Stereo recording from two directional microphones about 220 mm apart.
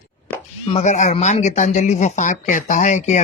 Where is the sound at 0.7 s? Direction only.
30° left (ahead or behind).